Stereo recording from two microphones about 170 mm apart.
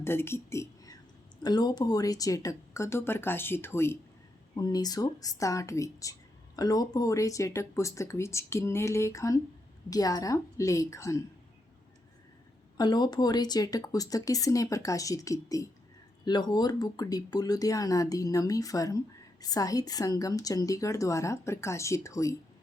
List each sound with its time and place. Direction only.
0.0 s a woman's voice: 15° left (ahead or behind)
12.7 s a woman's voice: 25° left (ahead or behind)